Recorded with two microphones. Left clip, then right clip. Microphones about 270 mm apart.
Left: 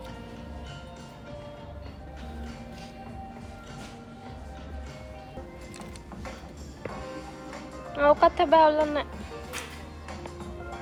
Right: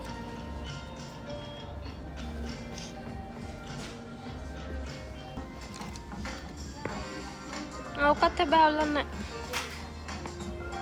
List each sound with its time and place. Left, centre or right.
7.9 s speech: centre